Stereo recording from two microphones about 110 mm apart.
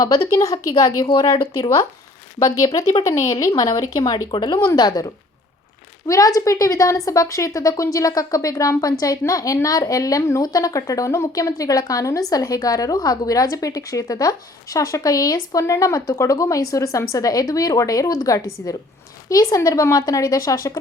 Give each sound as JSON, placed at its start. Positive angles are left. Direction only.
{"t": 0.0, "sound": "a woman's voice", "side_deg": 30}
{"t": 4.5, "sound": "a woman's voice", "side_deg": 30}